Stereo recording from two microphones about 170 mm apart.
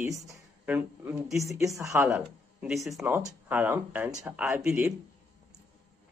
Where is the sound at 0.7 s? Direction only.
10° right (ahead or behind).